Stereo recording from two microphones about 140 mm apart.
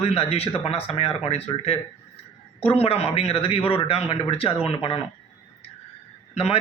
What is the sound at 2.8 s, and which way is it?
A man's voice, 45° left (ahead or behind).